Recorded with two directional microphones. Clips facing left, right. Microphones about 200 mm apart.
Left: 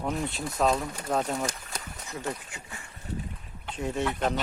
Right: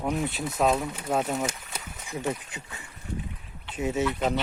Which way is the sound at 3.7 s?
5° right (ahead or behind).